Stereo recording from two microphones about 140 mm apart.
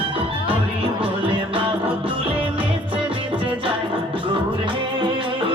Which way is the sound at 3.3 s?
40° right (ahead or behind).